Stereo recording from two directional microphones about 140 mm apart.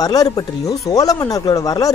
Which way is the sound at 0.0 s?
25° left (ahead or behind).